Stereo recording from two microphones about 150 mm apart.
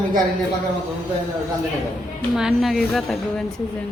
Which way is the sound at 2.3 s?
Centre (ahead or behind).